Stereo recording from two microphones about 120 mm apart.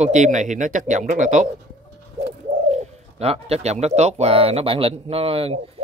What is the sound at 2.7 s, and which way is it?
A man's voice, 65° right (ahead or behind).